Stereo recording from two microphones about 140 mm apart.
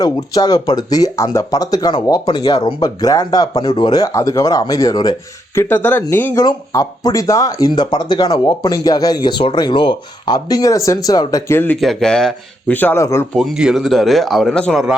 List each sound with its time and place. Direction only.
0.0 s speech: 25° left (ahead or behind)
5.5 s speech: 15° left (ahead or behind)
6.4 s speech: 25° left (ahead or behind)
11.8 s speech: centre (ahead or behind); by 13.2 s 20° left (ahead or behind)
13.3 s speech: centre (ahead or behind)